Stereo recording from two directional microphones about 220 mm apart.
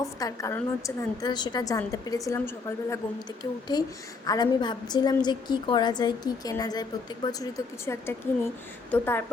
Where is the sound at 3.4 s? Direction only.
20° left (ahead or behind).